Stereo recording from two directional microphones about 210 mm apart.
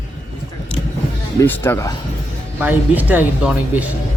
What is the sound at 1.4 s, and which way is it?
Speech, 10° left (ahead or behind).